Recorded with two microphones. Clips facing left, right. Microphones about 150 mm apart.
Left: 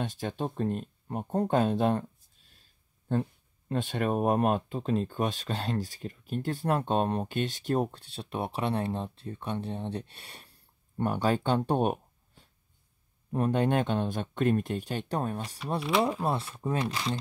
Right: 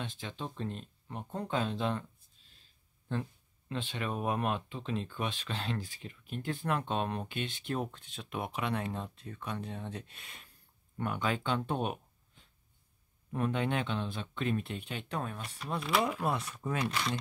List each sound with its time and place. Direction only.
0.0 s speech: 45° left (ahead or behind)
16.0 s speech: 30° left (ahead or behind)